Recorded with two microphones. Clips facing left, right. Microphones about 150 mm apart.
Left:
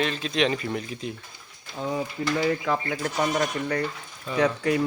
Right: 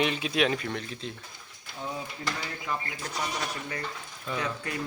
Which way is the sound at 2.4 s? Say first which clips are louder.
Left 10 dB; 80° left.